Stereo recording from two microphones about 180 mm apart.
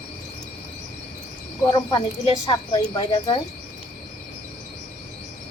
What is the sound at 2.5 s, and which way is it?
Speech, 30° left (ahead or behind).